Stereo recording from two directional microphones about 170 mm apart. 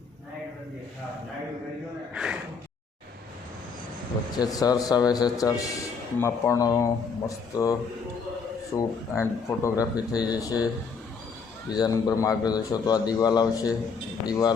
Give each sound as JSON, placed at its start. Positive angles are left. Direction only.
{"t": 2.1, "sound": "speech", "side_deg": -5}
{"t": 4.4, "sound": "a man's voice", "side_deg": 20}
{"t": 8.7, "sound": "a man's voice", "side_deg": 10}
{"t": 11.7, "sound": "a man's voice", "side_deg": 20}